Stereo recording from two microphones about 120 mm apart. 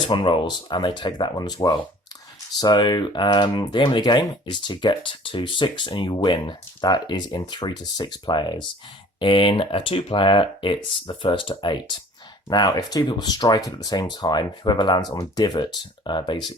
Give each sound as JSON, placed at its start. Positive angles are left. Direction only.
{"t": 0.1, "sound": "speech", "side_deg": 40}